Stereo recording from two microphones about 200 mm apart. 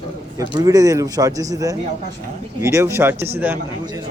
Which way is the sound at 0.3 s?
20° right (ahead or behind).